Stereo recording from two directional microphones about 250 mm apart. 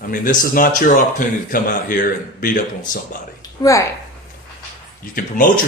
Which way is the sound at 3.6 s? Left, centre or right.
Centre.